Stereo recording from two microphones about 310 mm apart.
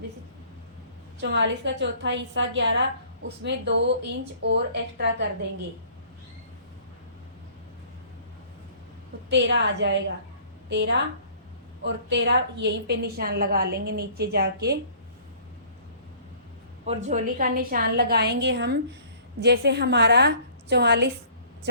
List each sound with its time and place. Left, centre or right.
1.2 s a woman's voice: right
9.3 s a woman's voice: right
16.8 s a woman's voice: right